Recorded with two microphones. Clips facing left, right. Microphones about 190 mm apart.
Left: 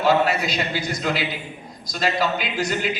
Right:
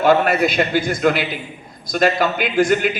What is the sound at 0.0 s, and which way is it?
A man's voice, 55° right (ahead or behind).